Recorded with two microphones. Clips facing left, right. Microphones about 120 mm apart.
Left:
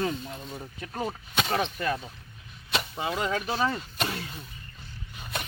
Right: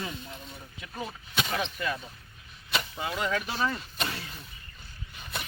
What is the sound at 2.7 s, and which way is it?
Speech, 25° left (ahead or behind).